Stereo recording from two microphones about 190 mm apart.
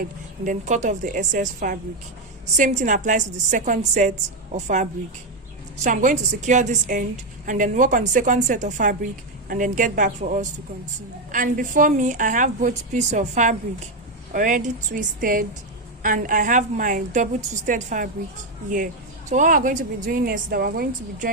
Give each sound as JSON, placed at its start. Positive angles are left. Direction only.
{"t": 0.4, "sound": "a woman's voice", "side_deg": -40}
{"t": 19.3, "sound": "a woman's voice", "side_deg": -45}